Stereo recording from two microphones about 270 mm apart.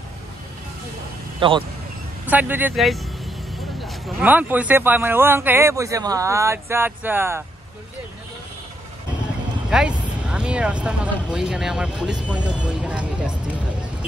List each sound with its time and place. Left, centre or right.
1.4 s speech: centre
2.2 s a man's voice: centre
9.7 s speech: centre